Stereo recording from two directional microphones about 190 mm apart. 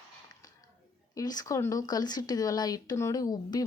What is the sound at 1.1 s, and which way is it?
Speech, 20° left (ahead or behind).